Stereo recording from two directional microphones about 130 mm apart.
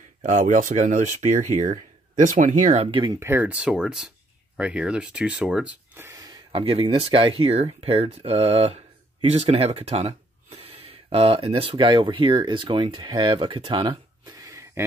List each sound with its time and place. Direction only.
0.2 s speech: 75° right (ahead or behind)
2.9 s speech: 35° right (ahead or behind)
3.2 s speech: 15° right (ahead or behind)
6.0 s a sound: 25° right (ahead or behind)
6.6 s speech: 40° right (ahead or behind)
11.7 s speech: 35° right (ahead or behind)